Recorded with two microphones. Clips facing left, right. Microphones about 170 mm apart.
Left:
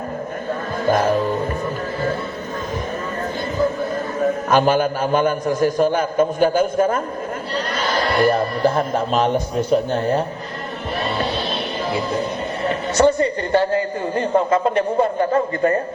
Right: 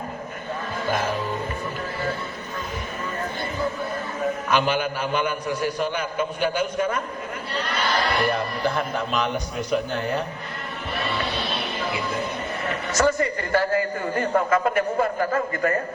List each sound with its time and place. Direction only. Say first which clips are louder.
0.9 s music: left 9 dB; 45° left (ahead or behind)
4.4 s a man's voice: left 7 dB; 45° left (ahead or behind)
8.0 s a man's voice: left 6 dB; 40° left (ahead or behind)
11.0 s music: left 5 dB; 35° left (ahead or behind)
11.9 s a man's voice: left 7 dB; 35° left (ahead or behind)